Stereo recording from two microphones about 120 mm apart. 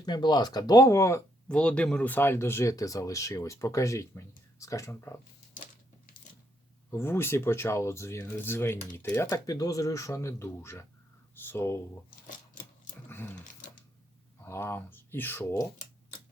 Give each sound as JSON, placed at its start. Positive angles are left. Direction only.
{"t": 0.0, "sound": "speech", "side_deg": 35}
{"t": 1.5, "sound": "speech", "side_deg": 10}
{"t": 6.9, "sound": "speech", "side_deg": 20}
{"t": 9.5, "sound": "speech", "side_deg": 30}
{"t": 13.1, "sound": "speech", "side_deg": 15}
{"t": 14.4, "sound": "speech", "side_deg": 20}